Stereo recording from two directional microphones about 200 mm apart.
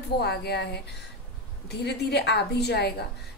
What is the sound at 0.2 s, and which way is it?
A woman's voice, 55° left (ahead or behind).